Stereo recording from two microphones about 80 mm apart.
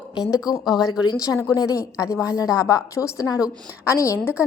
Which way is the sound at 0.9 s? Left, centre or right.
Left.